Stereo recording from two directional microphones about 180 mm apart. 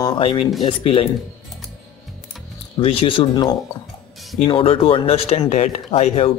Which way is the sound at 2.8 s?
30° left (ahead or behind).